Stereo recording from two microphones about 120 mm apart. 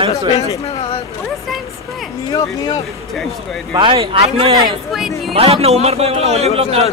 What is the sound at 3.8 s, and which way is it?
A man's voice, 45° right (ahead or behind).